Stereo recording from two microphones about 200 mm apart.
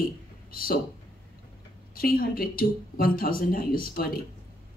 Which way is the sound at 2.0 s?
45° left (ahead or behind).